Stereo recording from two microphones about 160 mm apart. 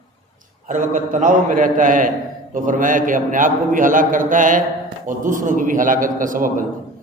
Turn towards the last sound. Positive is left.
turn(degrees=-55)  # may be behind; listen again after turning